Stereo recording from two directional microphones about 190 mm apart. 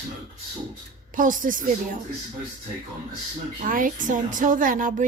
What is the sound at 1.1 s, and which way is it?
Speech, 45° right (ahead or behind).